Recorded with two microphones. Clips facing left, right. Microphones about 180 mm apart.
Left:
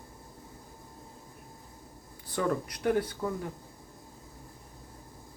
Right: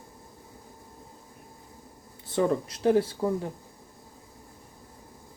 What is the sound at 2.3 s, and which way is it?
Speech, 25° right (ahead or behind).